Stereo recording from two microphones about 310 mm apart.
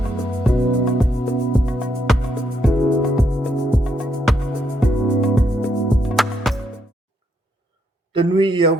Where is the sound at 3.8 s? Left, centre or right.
Centre.